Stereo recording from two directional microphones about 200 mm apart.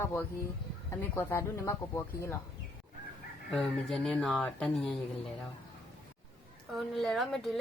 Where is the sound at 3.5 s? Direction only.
Centre (ahead or behind).